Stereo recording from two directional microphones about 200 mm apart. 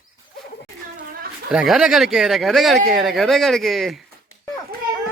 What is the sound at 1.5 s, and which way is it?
Speech, 5° right (ahead or behind).